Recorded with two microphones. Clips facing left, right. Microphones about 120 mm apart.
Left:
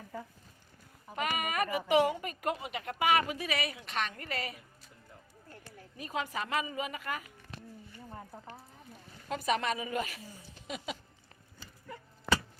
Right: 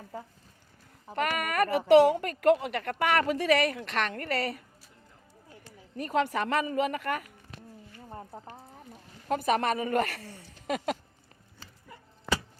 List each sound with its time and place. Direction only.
1.1 s a woman's voice: 60° right (ahead or behind)
6.0 s a woman's voice: 70° right (ahead or behind)
8.1 s speech: 30° right (ahead or behind)
9.3 s a woman's voice: 55° right (ahead or behind)